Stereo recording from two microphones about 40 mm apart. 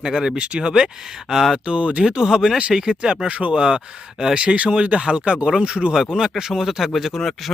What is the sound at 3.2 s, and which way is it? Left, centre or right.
Speech, right.